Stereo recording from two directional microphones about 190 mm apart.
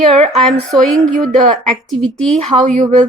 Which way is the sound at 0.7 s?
5° left (ahead or behind).